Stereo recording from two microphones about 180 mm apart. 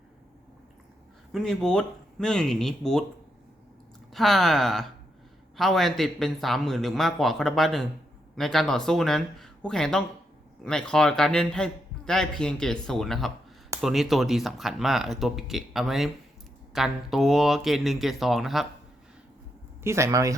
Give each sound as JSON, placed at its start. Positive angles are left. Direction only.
{"t": 1.3, "sound": "a man's voice", "side_deg": 5}
{"t": 4.1, "sound": "a man's voice", "side_deg": 0}
{"t": 19.8, "sound": "speech", "side_deg": -15}